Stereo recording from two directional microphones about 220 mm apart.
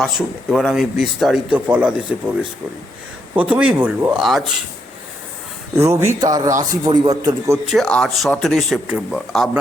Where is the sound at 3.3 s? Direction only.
5° right (ahead or behind).